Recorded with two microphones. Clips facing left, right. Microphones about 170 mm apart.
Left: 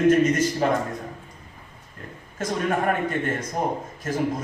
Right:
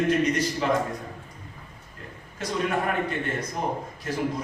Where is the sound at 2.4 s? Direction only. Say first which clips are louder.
Left 2 dB; 45° left (ahead or behind).